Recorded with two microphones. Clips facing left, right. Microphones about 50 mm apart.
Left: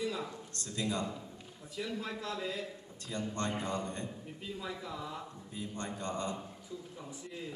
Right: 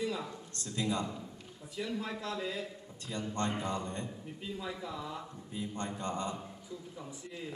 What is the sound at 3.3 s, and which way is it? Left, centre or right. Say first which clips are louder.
Speech: right 2 dB; right.